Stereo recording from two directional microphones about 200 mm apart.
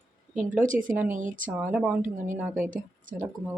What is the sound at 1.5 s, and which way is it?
Speech, 5° right (ahead or behind).